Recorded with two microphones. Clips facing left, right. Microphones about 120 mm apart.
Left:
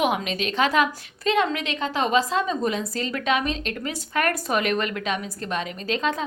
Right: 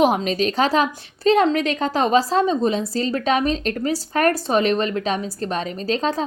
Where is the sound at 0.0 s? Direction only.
35° right (ahead or behind).